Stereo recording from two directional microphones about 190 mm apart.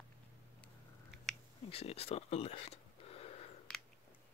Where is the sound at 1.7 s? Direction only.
30° left (ahead or behind).